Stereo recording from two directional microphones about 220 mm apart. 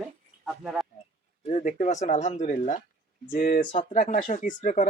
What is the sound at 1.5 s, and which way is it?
Speech, 30° left (ahead or behind).